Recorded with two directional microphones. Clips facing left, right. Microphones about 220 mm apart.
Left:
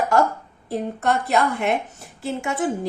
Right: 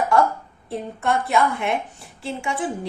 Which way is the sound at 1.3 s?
45° left (ahead or behind).